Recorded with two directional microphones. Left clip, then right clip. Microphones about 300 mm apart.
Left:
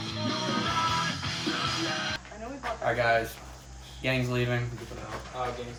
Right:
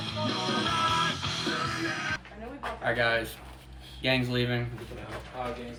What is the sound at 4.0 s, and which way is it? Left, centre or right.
Speech, centre.